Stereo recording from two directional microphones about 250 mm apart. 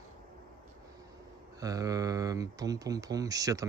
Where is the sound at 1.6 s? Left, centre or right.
Centre.